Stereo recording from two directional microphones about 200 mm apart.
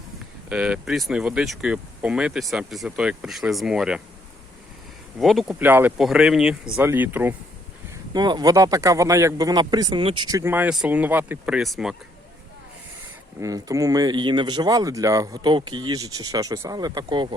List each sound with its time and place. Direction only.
0.4 s speech: 5° right (ahead or behind)
5.2 s speech: centre (ahead or behind)
8.1 s speech: 20° right (ahead or behind); by 11.9 s centre (ahead or behind)
13.4 s speech: 15° right (ahead or behind)